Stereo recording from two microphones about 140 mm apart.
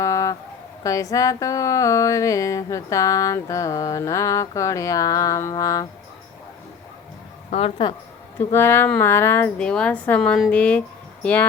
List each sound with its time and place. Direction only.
0.0 s a sound: 25° left (ahead or behind)
0.9 s speech: 25° left (ahead or behind)
7.5 s speech: 40° left (ahead or behind)
8.5 s a woman's voice: 15° left (ahead or behind)